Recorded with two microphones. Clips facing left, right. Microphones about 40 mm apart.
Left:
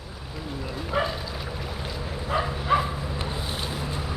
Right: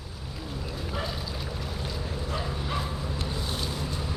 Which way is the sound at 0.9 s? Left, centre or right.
Left.